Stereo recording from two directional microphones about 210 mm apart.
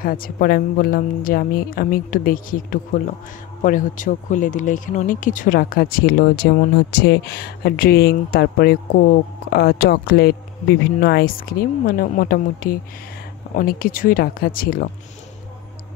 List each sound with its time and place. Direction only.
0.0 s speech: 45° left (ahead or behind)